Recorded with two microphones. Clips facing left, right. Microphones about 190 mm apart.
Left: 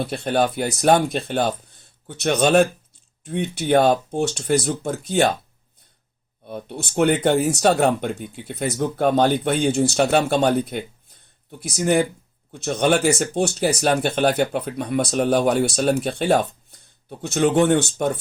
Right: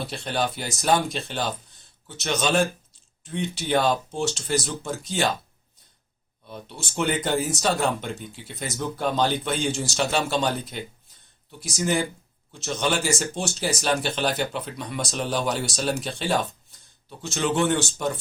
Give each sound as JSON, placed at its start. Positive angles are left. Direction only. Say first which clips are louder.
{"t": 0.0, "sound": "speech", "louder": "left 6 dB", "side_deg": 55}
{"t": 6.4, "sound": "speech", "louder": "left 7 dB", "side_deg": 55}